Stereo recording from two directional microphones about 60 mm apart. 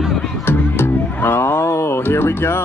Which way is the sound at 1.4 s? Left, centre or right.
Left.